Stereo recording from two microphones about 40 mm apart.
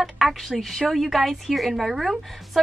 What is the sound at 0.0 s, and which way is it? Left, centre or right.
A woman's voice, centre.